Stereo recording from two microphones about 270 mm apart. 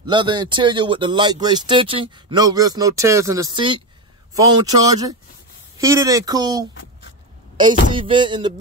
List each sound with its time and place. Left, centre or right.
0.1 s speech: centre